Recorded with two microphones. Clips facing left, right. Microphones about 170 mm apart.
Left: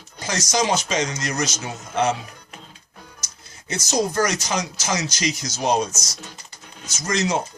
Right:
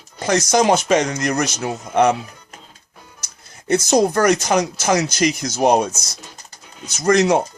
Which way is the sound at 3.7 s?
55° right (ahead or behind).